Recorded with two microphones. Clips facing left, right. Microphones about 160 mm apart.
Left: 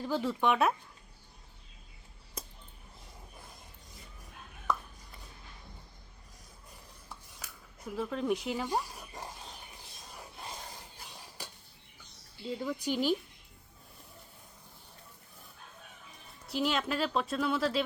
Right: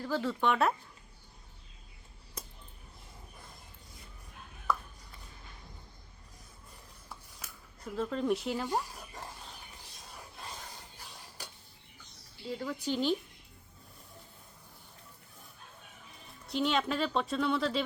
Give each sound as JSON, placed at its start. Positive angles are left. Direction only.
{"t": 0.0, "sound": "speech", "side_deg": 15}
{"t": 7.9, "sound": "speech", "side_deg": 5}
{"t": 12.5, "sound": "speech", "side_deg": 15}
{"t": 16.5, "sound": "speech", "side_deg": 5}